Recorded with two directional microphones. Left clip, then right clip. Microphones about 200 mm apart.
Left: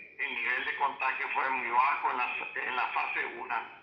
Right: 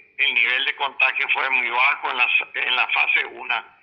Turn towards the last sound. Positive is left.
turn(degrees=-45)  # may be behind; listen again after turning